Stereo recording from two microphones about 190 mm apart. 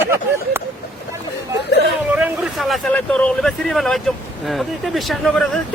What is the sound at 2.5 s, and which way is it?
A man's voice, centre (ahead or behind).